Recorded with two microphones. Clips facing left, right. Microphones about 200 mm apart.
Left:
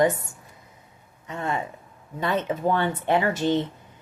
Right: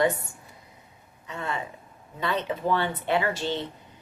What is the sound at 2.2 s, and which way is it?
Speech, 45° left (ahead or behind).